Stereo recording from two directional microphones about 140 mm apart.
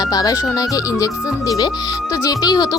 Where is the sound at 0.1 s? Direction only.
25° left (ahead or behind).